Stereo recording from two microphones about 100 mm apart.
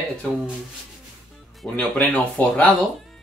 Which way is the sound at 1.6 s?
15° left (ahead or behind).